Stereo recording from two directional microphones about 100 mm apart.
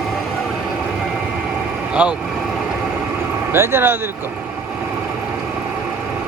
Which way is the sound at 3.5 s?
25° right (ahead or behind).